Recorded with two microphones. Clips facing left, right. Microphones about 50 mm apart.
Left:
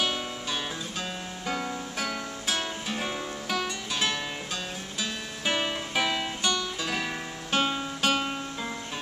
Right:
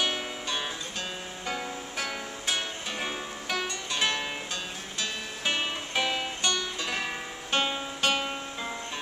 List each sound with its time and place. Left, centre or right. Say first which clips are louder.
0.0 s music: left 1 dB; centre
5.4 s music: left 2 dB; centre